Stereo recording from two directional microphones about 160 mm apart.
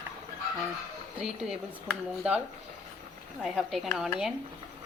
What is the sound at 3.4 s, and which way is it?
Speech, centre (ahead or behind).